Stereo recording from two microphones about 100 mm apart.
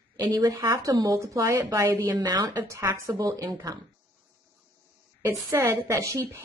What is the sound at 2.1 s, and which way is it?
Speech, 45° right (ahead or behind).